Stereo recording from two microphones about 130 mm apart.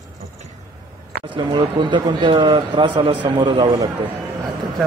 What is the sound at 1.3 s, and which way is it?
Speech, 35° right (ahead or behind).